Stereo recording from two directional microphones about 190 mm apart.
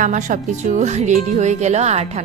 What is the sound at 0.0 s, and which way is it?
Speech, 40° right (ahead or behind).